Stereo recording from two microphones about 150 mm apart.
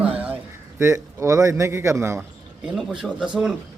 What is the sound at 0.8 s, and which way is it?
Speech, 20° right (ahead or behind).